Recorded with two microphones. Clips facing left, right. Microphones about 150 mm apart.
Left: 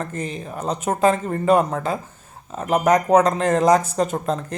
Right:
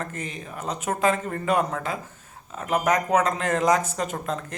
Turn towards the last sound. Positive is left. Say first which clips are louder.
# left 6 dB
turn(degrees=35)  # may be behind; listen again after turning